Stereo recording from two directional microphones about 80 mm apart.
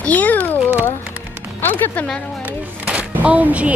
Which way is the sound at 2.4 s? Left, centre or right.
Centre.